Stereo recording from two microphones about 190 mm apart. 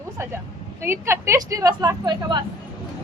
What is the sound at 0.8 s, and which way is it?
Speech, 15° right (ahead or behind).